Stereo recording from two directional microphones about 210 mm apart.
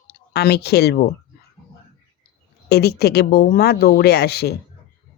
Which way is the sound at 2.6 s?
50° left (ahead or behind).